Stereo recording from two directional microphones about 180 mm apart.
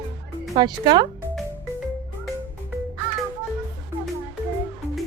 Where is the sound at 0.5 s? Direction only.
25° right (ahead or behind).